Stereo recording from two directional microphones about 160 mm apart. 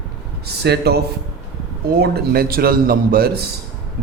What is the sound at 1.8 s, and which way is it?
A man's voice, 75° right (ahead or behind).